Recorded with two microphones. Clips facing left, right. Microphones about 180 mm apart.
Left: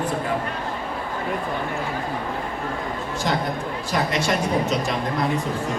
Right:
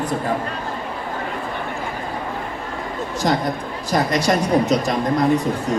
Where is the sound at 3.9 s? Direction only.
40° right (ahead or behind).